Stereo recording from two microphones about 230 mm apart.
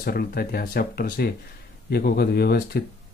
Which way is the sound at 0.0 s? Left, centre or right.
Left.